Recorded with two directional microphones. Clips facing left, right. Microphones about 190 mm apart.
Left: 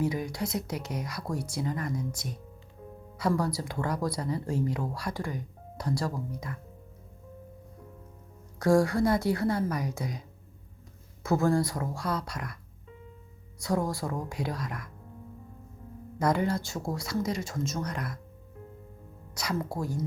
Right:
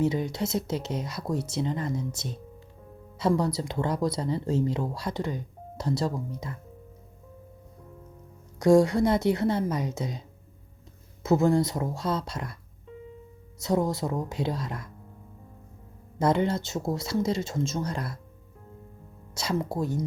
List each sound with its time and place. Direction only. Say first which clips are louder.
0.0 s speech: right 4 dB; 25° right (ahead or behind)
8.5 s speech: right 4 dB; 20° right (ahead or behind)
13.6 s speech: right 4 dB; 20° right (ahead or behind)
16.1 s speech: right 3 dB; 25° right (ahead or behind)
19.3 s speech: right 3 dB; 25° right (ahead or behind)